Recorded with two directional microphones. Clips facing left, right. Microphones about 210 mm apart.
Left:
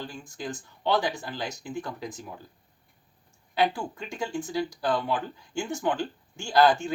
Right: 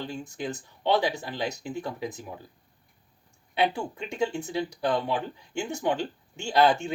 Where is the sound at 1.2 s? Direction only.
20° right (ahead or behind).